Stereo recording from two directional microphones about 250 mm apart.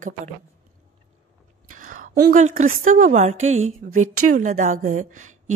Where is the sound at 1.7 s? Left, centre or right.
Right.